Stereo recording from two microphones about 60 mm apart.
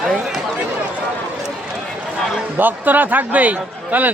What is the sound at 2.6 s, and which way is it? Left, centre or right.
A man's voice, right.